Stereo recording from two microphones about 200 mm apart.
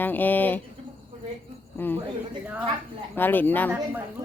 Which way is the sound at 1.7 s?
10° left (ahead or behind).